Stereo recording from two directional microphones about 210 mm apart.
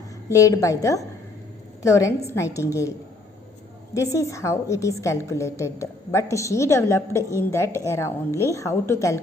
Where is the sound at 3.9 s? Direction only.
15° left (ahead or behind).